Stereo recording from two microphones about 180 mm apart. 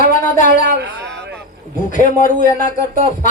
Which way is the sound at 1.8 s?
45° left (ahead or behind).